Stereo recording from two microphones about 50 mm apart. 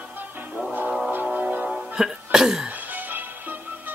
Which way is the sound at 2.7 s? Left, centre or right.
Right.